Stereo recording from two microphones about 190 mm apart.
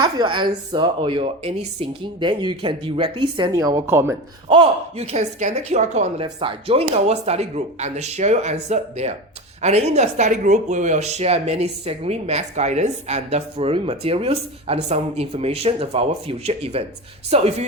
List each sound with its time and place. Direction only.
0.0 s a woman's voice: 25° right (ahead or behind)
4.4 s speech: 30° right (ahead or behind)